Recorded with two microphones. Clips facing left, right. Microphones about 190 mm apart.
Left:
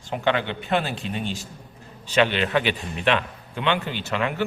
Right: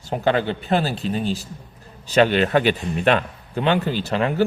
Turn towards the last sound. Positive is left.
turn(degrees=-35)  # may be behind; listen again after turning